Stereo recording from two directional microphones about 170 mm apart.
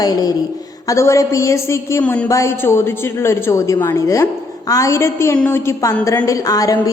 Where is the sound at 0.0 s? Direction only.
20° left (ahead or behind).